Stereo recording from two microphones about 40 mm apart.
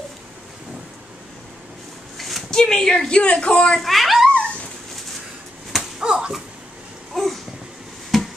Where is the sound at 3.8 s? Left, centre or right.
Centre.